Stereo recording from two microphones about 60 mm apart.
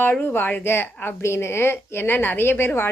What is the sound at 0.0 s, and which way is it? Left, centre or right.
A woman's voice, left.